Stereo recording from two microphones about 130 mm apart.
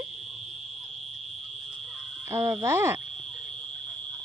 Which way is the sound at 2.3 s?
20° right (ahead or behind).